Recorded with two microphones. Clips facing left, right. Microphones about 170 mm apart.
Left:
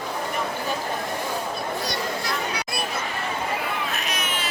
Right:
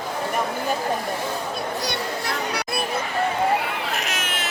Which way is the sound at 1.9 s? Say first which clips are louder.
Right 1 dB; 65° right (ahead or behind).